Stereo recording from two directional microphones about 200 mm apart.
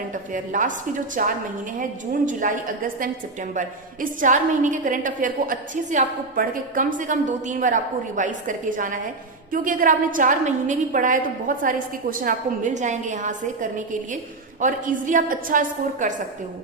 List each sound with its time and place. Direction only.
0.1 s a woman's voice: 40° right (ahead or behind)